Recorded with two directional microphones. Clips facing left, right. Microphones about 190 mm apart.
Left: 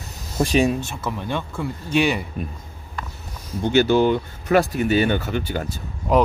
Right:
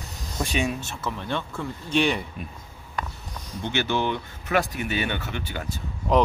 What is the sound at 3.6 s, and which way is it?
Speech, 40° left (ahead or behind).